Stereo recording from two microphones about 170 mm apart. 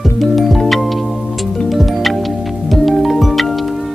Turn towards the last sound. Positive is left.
turn(degrees=0)  # may be behind; listen again after turning